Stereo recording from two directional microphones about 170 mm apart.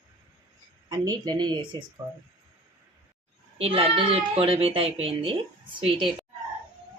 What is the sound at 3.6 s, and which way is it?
A child's voice, 35° right (ahead or behind).